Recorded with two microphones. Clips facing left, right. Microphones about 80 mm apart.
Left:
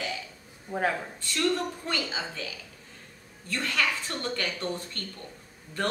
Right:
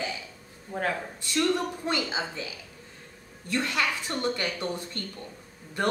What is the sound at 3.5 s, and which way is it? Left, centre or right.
A woman's voice, centre.